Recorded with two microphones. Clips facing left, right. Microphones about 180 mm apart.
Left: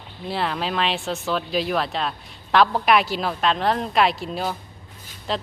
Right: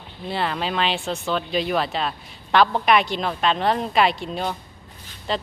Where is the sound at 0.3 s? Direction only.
Centre (ahead or behind).